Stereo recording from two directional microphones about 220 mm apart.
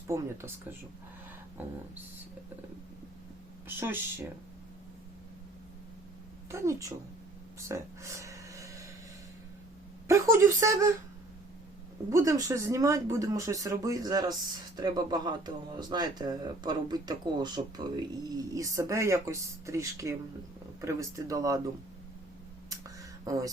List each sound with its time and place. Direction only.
0.1 s speech: 10° right (ahead or behind)
3.7 s speech: 10° right (ahead or behind)
6.5 s speech: 15° right (ahead or behind)
7.7 s a sound: 15° right (ahead or behind)
10.1 s speech: 10° right (ahead or behind)
12.1 s speech: 15° right (ahead or behind)
22.8 s a sound: 15° right (ahead or behind)